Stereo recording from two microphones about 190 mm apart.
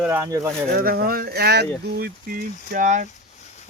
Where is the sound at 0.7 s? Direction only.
50° right (ahead or behind).